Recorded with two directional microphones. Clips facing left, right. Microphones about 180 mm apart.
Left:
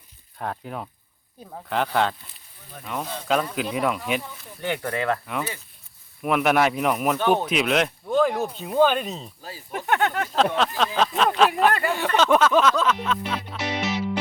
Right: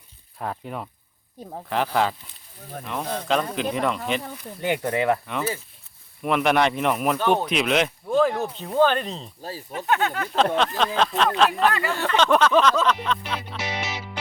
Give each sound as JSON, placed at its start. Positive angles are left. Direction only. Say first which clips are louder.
{"t": 0.3, "sound": "speech", "louder": "even", "side_deg": 0}
{"t": 1.4, "sound": "speech", "louder": "right 3 dB", "side_deg": -30}
{"t": 1.7, "sound": "speech", "louder": "even", "side_deg": 0}
{"t": 4.6, "sound": "speech", "louder": "right 3 dB", "side_deg": -15}
{"t": 5.2, "sound": "speech", "louder": "right 2 dB", "side_deg": 5}
{"t": 10.3, "sound": "speech", "louder": "right 3 dB", "side_deg": 0}
{"t": 11.9, "sound": "music", "louder": "left 1 dB", "side_deg": 5}